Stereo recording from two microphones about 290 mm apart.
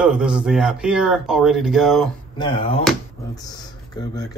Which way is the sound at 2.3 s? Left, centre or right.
Centre.